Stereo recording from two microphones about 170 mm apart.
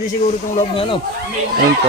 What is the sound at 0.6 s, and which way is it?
Speech, 35° left (ahead or behind).